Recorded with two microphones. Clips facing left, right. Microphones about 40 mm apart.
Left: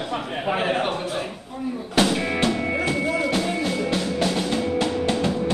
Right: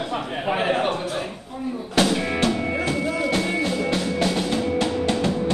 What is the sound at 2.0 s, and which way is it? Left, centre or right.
Music, centre.